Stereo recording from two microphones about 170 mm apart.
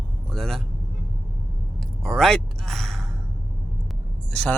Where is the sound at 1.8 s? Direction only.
Centre (ahead or behind).